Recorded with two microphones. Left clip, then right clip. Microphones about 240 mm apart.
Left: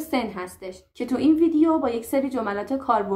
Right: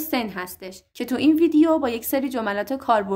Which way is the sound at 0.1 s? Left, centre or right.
Right.